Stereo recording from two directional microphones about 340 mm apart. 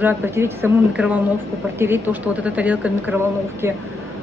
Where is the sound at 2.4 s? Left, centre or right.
Centre.